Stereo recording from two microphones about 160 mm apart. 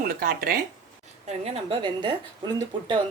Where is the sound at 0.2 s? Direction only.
70° right (ahead or behind).